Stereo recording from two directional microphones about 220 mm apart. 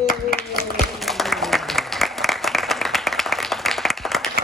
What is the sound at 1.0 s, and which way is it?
Applause, centre (ahead or behind).